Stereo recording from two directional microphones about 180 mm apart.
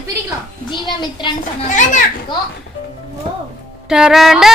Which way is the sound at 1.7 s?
45° left (ahead or behind).